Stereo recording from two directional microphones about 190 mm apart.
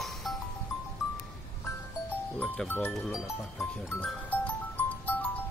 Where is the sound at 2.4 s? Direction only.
10° left (ahead or behind).